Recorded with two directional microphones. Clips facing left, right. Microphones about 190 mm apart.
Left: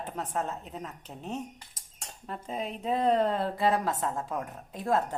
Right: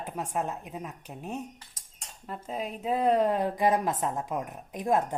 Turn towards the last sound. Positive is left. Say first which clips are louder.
# right 2 dB
turn(degrees=-15)  # may be behind; listen again after turning